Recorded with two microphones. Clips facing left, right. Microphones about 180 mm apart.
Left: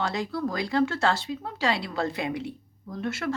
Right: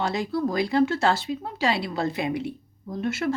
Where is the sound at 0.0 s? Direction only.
5° right (ahead or behind).